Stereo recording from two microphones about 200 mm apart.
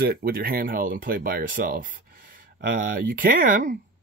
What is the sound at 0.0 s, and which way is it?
Speech, 50° right (ahead or behind).